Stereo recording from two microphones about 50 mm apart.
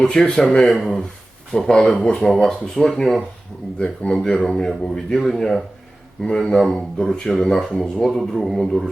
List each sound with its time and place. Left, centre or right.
0.1 s speech: centre
3.8 s speech: left
4.2 s speech: centre